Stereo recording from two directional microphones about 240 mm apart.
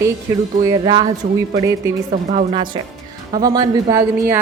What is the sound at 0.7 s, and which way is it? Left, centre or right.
Speech, centre.